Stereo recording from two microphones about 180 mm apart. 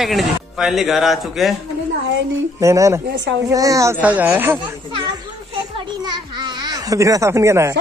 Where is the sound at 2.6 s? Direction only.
15° right (ahead or behind).